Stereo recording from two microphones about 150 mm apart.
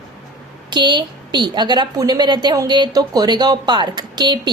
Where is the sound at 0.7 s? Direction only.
30° right (ahead or behind).